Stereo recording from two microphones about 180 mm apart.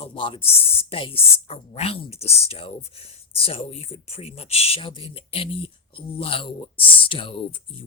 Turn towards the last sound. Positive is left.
turn(degrees=30)  # may be behind; listen again after turning